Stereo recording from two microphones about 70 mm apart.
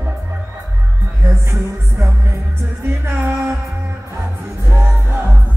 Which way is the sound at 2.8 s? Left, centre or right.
Right.